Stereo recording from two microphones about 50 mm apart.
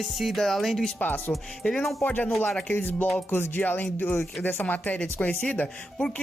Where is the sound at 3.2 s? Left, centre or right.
Left.